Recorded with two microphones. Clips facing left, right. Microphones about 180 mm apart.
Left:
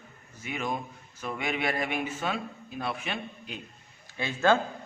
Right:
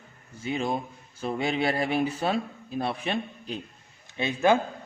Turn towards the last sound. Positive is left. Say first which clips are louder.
# right 2 dB
turn(degrees=-20)  # may be behind; listen again after turning